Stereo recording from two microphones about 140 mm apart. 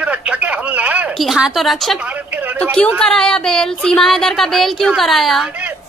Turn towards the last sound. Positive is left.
turn(degrees=0)  # may be behind; listen again after turning